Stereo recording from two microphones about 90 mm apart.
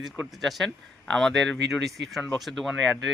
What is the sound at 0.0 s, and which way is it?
A man's voice, 5° right (ahead or behind).